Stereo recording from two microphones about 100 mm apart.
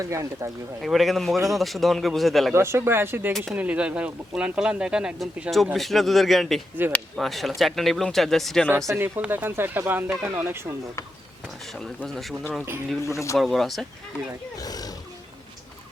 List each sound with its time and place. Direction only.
0.1 s speech: 30° right (ahead or behind)
0.8 s a man's voice: centre (ahead or behind)
2.5 s a man's voice: 25° right (ahead or behind); by 8.6 s 5° left (ahead or behind)
8.9 s speech: 25° right (ahead or behind)
12.0 s a man's voice: 5° left (ahead or behind)
13.1 s speech: 30° left (ahead or behind)
13.3 s a man's voice: centre (ahead or behind)
14.6 s speech: 40° left (ahead or behind)